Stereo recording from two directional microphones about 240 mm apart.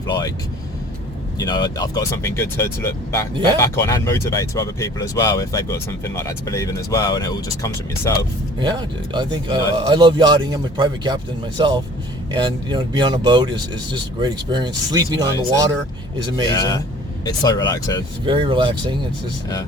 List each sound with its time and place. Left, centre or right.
0.1 s speech: centre
1.4 s speech: centre
8.5 s speech: centre
16.6 s speech: centre
18.3 s speech: right